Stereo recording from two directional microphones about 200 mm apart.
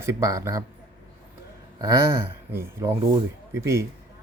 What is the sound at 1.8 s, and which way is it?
Speech, 15° right (ahead or behind).